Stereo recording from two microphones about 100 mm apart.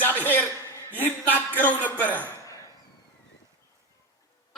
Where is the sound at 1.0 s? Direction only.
20° left (ahead or behind).